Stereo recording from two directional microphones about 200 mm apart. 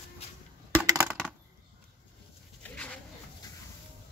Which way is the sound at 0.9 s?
10° right (ahead or behind).